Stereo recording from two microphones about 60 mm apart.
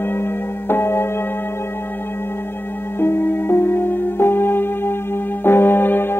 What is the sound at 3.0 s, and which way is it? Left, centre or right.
Music, left.